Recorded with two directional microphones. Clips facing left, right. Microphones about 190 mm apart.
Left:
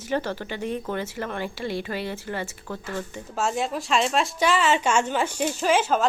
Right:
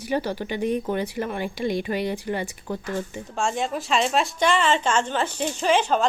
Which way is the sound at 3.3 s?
5° left (ahead or behind).